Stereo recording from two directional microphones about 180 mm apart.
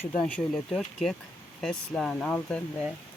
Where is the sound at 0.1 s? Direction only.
5° left (ahead or behind).